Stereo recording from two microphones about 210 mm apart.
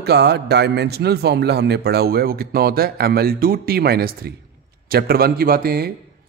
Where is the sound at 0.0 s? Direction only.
50° right (ahead or behind).